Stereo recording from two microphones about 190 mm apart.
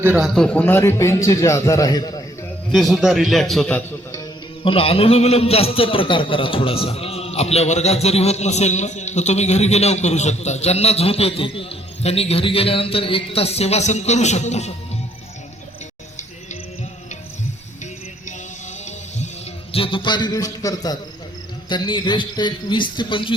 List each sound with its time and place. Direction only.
0.0 s a man's voice: 10° right (ahead or behind)
0.3 s a man's voice: 5° left (ahead or behind)
2.7 s a man's voice: centre (ahead or behind)
4.1 s a man's voice: 25° left (ahead or behind)
19.7 s a man's voice: 30° left (ahead or behind)